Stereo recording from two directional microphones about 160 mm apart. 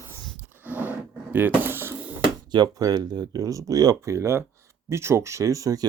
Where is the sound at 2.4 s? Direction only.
25° right (ahead or behind).